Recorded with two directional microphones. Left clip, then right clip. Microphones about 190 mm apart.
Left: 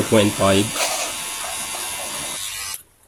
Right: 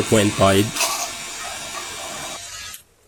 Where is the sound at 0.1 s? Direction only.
10° right (ahead or behind).